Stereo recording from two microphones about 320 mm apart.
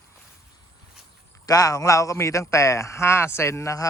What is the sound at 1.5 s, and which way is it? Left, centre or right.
Speech, centre.